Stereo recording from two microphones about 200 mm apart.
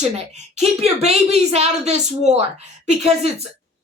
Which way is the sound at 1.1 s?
30° right (ahead or behind).